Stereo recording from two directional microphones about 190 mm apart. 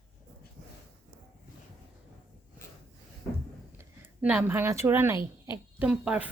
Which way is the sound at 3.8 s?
10° right (ahead or behind).